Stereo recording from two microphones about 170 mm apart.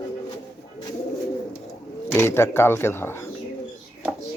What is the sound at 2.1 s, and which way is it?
Speech, 15° left (ahead or behind).